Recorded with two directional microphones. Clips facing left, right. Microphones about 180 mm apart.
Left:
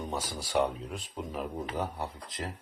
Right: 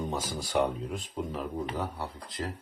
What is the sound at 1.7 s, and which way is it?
Speech, 20° left (ahead or behind).